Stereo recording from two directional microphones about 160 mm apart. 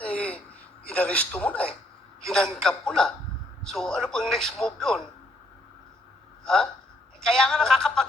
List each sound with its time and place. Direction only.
0.0 s gasp: 5° left (ahead or behind)
0.9 s a man's voice: 5° left (ahead or behind)
6.4 s a man's voice: 5° left (ahead or behind)